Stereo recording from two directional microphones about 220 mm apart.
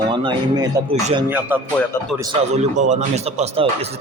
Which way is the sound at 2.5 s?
30° right (ahead or behind).